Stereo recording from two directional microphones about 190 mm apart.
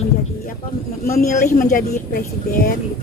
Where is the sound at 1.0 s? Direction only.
50° left (ahead or behind).